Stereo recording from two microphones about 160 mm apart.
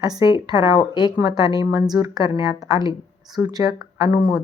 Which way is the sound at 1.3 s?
25° right (ahead or behind).